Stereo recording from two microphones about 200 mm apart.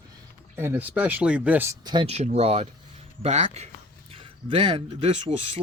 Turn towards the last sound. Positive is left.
turn(degrees=-30)  # may be behind; listen again after turning